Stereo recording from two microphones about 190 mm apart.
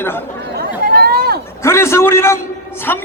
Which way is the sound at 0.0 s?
10° left (ahead or behind).